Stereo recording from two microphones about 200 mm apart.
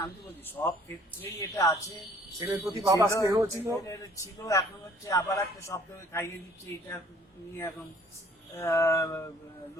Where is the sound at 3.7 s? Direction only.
15° left (ahead or behind).